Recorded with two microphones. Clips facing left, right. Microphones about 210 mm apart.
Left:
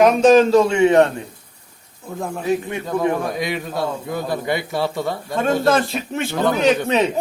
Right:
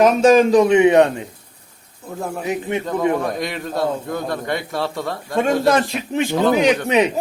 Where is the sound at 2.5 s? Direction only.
20° right (ahead or behind).